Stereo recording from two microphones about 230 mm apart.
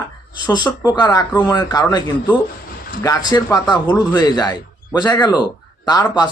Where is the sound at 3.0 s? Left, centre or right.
Centre.